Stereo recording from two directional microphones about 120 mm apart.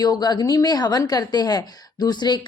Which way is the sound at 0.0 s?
35° left (ahead or behind).